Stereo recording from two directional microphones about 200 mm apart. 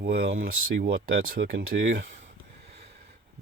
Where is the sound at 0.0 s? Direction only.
55° right (ahead or behind).